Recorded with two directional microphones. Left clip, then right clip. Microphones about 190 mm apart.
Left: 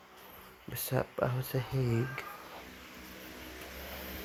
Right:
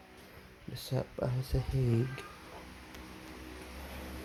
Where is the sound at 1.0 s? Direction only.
15° left (ahead or behind).